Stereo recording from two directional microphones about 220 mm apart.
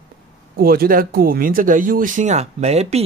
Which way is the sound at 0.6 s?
40° right (ahead or behind).